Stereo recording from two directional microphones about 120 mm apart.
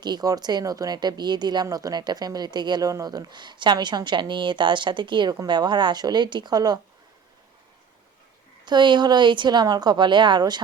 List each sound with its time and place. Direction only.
0.0 s speech: 35° right (ahead or behind)
8.6 s speech: 40° right (ahead or behind)